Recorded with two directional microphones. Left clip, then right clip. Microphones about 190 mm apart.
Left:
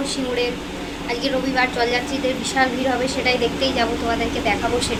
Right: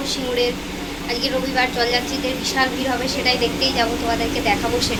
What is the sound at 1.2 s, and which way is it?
Speech, 10° left (ahead or behind).